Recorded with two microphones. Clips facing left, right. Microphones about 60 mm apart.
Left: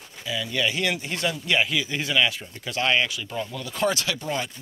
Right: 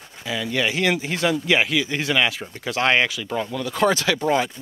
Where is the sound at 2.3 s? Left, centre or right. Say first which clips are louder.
Right 5 dB; right.